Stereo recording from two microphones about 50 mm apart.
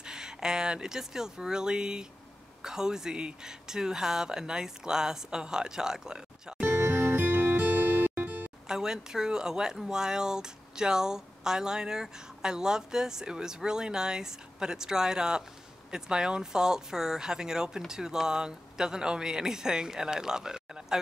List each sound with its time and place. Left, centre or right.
0.0 s speech: centre
6.8 s music: right
8.6 s speech: centre